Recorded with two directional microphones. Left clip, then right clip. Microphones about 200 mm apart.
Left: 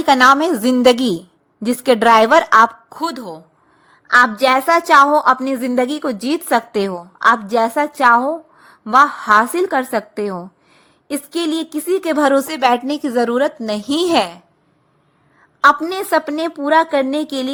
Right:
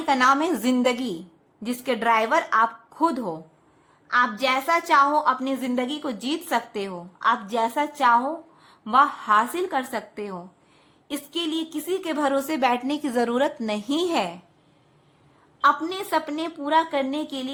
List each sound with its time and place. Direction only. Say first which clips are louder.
0.0 s speech: left 9 dB; 35° left (ahead or behind)
4.0 s a woman's voice: left 10 dB; 40° left (ahead or behind)
15.6 s speech: left 8 dB; 35° left (ahead or behind)